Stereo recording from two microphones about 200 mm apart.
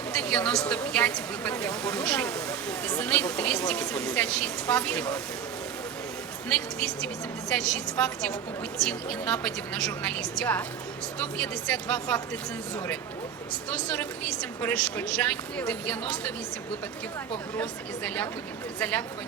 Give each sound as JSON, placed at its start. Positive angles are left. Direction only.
{"t": 0.1, "sound": "a woman's voice", "side_deg": 5}
{"t": 7.5, "sound": "speech", "side_deg": 5}
{"t": 13.7, "sound": "speech", "side_deg": 5}
{"t": 17.6, "sound": "speech", "side_deg": 10}